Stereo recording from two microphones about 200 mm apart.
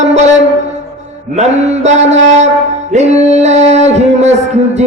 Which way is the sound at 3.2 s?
35° right (ahead or behind).